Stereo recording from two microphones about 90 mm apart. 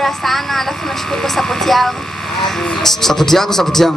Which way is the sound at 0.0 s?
Centre (ahead or behind).